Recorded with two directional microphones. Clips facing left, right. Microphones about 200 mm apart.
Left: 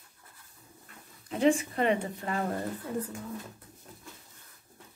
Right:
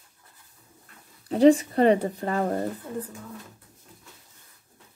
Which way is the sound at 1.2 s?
35° right (ahead or behind).